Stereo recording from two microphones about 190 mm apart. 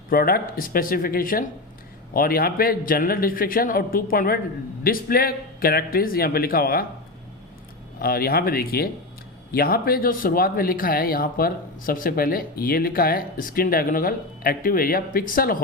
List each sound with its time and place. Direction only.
0.1 s speech: 50° left (ahead or behind)
7.9 s speech: 50° left (ahead or behind)